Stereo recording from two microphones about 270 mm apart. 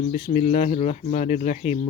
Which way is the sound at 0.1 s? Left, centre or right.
Left.